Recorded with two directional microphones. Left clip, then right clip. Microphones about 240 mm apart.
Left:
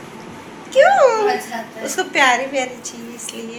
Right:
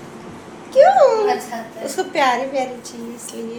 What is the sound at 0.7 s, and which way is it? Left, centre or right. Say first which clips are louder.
A woman's voice: even; centre.